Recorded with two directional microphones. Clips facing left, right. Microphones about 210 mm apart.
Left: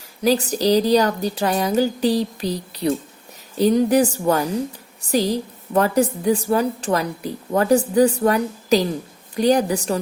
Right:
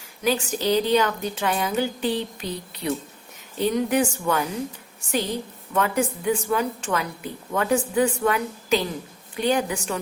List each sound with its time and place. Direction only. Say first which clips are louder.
0.2 s a woman's voice: left 5 dB; 35° left (ahead or behind)